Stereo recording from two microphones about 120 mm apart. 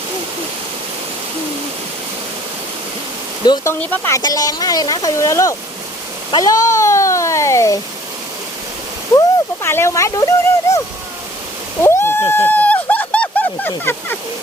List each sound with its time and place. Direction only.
3.4 s speech: 40° left (ahead or behind)
3.8 s speech: 15° left (ahead or behind)
4.1 s speech: 30° left (ahead or behind)
9.6 s speech: 20° left (ahead or behind)
11.8 s a sound: 20° left (ahead or behind)